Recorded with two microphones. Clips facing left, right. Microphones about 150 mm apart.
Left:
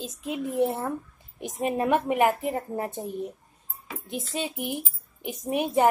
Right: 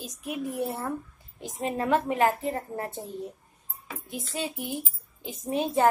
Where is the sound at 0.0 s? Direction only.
25° left (ahead or behind).